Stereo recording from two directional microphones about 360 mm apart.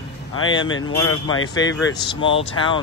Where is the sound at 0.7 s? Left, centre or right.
Left.